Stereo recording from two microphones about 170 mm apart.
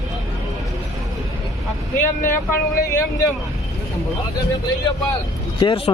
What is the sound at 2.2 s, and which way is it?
Speech, 15° left (ahead or behind).